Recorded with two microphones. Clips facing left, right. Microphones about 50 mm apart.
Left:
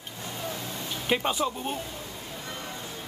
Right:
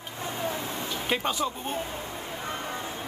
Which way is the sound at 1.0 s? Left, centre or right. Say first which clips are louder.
Left 2 dB; centre.